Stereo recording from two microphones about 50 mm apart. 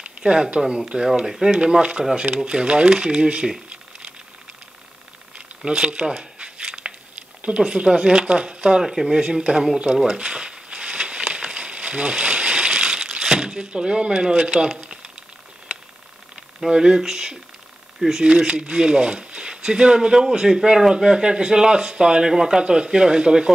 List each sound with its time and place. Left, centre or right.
0.2 s speech: centre
5.7 s speech: centre
6.6 s a sound: centre
8.8 s speech: centre
9.1 s speech: centre
9.9 s a sound: centre
11.3 s crushing: centre
16.6 s speech: centre